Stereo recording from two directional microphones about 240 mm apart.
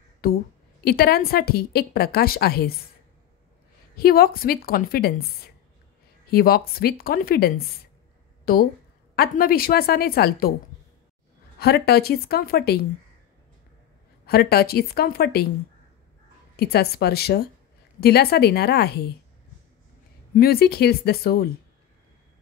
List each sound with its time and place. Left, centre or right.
0.2 s a woman's voice: left
3.9 s a woman's voice: left
11.6 s a woman's voice: left
14.2 s a woman's voice: left
16.5 s a woman's voice: left
20.3 s a woman's voice: left